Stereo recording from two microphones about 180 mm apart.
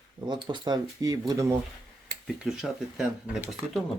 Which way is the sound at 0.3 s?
25° right (ahead or behind).